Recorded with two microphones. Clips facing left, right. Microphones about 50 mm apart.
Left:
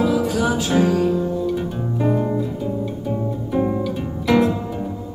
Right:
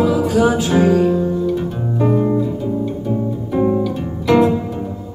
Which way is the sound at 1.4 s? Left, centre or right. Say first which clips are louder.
Right 3 dB; centre.